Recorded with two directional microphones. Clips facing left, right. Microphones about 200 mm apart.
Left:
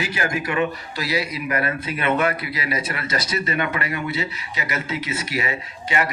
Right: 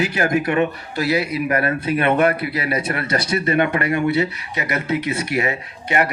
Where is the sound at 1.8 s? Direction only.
55° right (ahead or behind).